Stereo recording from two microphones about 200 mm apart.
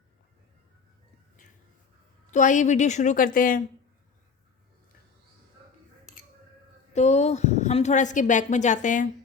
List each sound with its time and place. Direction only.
2.3 s a woman's voice: 40° left (ahead or behind)
6.9 s a woman's voice: 35° left (ahead or behind)